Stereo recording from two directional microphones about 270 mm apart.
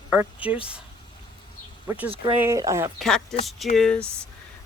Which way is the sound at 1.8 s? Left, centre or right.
Centre.